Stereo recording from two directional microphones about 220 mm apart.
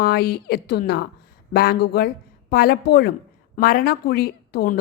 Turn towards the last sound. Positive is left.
turn(degrees=45)  # may be behind; listen again after turning